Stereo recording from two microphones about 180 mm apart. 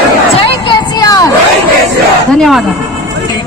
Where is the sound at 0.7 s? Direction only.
20° left (ahead or behind).